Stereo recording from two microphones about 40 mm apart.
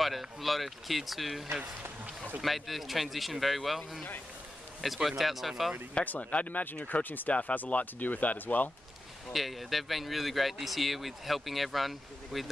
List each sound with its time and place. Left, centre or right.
0.0 s speech: centre
1.6 s run: right
2.4 s speech: centre
6.0 s speech: left
9.3 s speech: centre